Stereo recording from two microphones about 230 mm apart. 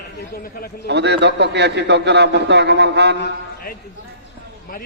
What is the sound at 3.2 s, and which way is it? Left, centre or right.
Speech, left.